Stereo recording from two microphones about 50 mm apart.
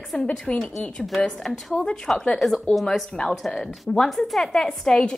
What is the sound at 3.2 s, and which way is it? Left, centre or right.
Speech, left.